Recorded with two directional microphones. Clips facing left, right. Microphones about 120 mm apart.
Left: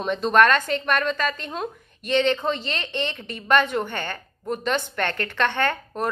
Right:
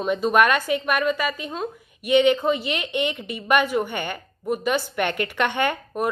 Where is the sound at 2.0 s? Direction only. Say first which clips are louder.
Right 4 dB; 10° right (ahead or behind).